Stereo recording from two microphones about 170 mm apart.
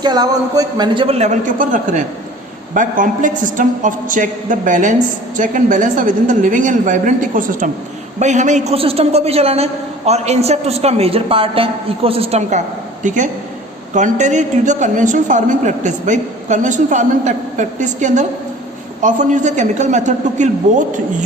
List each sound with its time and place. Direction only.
0.0 s a woman's voice: 25° right (ahead or behind); by 21.2 s 45° right (ahead or behind)